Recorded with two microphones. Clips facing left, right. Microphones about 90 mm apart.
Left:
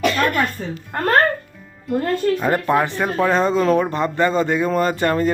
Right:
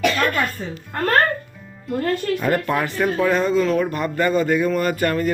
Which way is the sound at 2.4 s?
20° left (ahead or behind).